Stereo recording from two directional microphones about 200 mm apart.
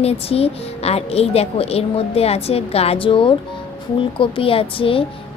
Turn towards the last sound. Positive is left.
turn(degrees=25)  # may be behind; listen again after turning